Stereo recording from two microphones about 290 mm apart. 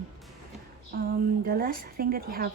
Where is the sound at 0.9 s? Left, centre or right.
Right.